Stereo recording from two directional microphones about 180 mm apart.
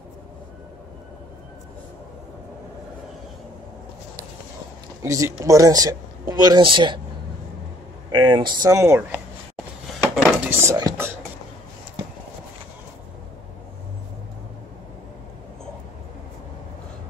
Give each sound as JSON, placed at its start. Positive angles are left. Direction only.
{"t": 5.0, "sound": "speech", "side_deg": -15}
{"t": 8.1, "sound": "speech", "side_deg": -25}
{"t": 10.1, "sound": "dishes", "side_deg": 0}
{"t": 10.5, "sound": "whispering", "side_deg": -20}